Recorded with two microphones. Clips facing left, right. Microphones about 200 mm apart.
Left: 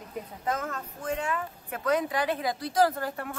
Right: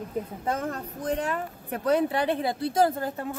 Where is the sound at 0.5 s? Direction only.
30° right (ahead or behind).